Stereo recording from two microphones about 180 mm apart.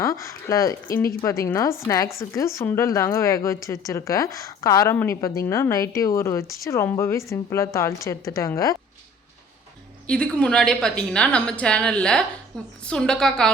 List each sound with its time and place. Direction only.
0.0 s a sound: 15° left (ahead or behind)
0.9 s a woman's voice: 15° left (ahead or behind)
10.1 s a woman's voice: 5° left (ahead or behind)